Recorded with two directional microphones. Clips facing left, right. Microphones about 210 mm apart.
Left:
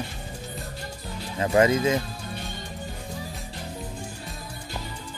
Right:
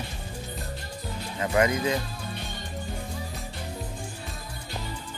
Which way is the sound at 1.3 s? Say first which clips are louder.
Left 4 dB; 25° left (ahead or behind).